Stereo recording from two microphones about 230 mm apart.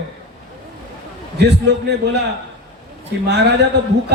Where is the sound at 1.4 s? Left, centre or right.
Right.